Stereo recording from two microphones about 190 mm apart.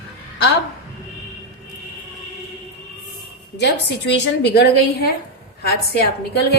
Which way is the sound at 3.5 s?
65° left (ahead or behind).